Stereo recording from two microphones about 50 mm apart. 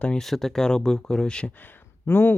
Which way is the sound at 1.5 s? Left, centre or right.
Left.